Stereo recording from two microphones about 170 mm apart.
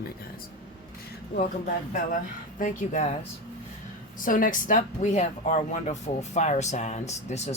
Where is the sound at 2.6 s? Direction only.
45° left (ahead or behind).